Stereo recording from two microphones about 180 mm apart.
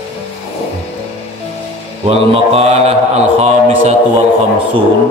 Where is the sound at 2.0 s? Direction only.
35° right (ahead or behind).